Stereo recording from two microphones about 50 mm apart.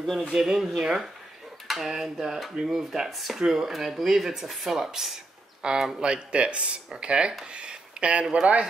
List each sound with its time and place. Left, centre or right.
0.3 s speech: centre; by 8.6 s right